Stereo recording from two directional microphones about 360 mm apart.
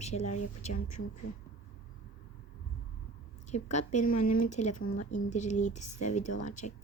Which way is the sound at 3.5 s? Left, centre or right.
Centre.